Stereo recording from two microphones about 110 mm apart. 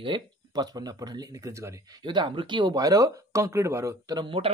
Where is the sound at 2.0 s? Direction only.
45° right (ahead or behind).